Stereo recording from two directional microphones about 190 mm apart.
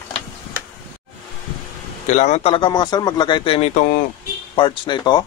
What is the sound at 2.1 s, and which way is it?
A man's voice, 40° left (ahead or behind).